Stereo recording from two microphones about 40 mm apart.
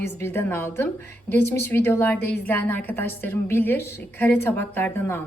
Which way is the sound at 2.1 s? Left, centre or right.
Left.